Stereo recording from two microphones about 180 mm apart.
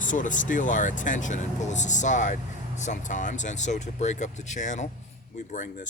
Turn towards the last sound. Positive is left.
turn(degrees=45)  # may be behind; listen again after turning